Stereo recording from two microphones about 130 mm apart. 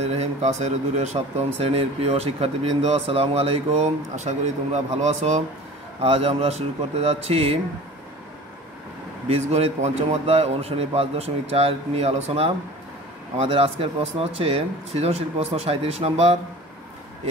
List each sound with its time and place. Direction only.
0.0 s a man's voice: 55° right (ahead or behind)
5.9 s speech: 50° right (ahead or behind)
9.3 s speech: 55° right (ahead or behind)